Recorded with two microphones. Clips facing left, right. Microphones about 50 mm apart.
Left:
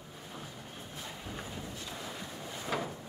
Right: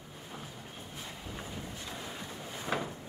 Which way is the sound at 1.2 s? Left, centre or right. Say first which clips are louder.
Even; centre.